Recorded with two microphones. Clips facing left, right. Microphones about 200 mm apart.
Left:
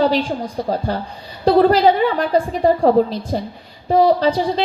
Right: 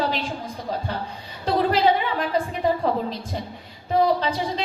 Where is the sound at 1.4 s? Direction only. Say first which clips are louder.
Left 8 dB; 40° left (ahead or behind).